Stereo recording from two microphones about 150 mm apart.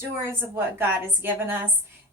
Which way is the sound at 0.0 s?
15° right (ahead or behind).